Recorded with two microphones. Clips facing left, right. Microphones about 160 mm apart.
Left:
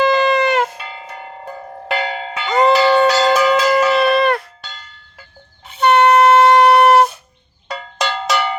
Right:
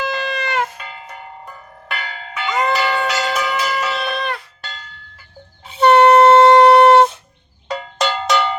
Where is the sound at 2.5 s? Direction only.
35° left (ahead or behind).